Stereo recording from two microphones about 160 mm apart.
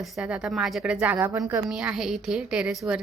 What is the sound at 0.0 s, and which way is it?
A woman's voice, 5° right (ahead or behind).